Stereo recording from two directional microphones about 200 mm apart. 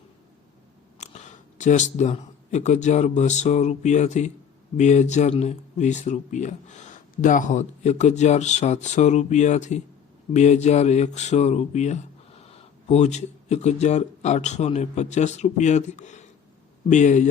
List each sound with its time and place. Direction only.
0.9 s speech: 35° left (ahead or behind)